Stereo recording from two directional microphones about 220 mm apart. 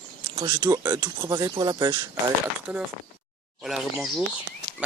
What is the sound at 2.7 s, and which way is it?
Speech, 5° right (ahead or behind).